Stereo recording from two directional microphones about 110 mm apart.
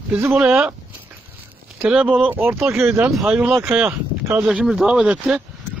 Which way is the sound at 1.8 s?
10° right (ahead or behind).